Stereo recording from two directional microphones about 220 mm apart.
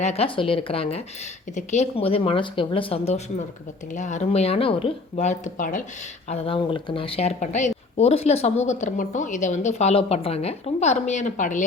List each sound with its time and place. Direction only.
0.0 s speech: 25° left (ahead or behind)